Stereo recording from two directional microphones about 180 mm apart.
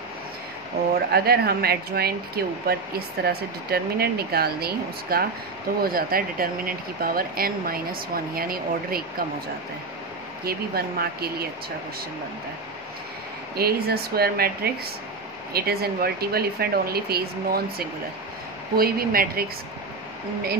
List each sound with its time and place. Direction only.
1.1 s speech: 60° right (ahead or behind)
10.4 s speech: 60° right (ahead or behind)
13.6 s speech: 60° right (ahead or behind)